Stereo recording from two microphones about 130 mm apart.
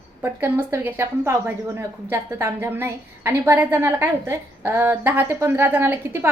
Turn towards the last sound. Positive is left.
turn(degrees=-20)  # may be behind; listen again after turning